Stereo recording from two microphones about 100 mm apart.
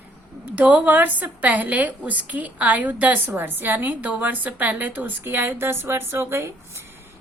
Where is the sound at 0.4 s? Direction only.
15° right (ahead or behind).